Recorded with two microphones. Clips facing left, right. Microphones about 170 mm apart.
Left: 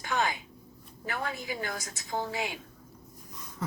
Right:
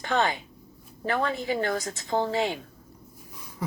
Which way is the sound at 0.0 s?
60° right (ahead or behind).